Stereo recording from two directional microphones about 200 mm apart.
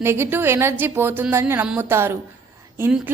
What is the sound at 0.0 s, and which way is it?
A woman's voice, 10° right (ahead or behind).